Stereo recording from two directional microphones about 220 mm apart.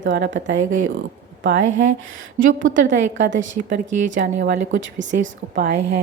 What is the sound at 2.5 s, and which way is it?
A woman's voice, 60° right (ahead or behind).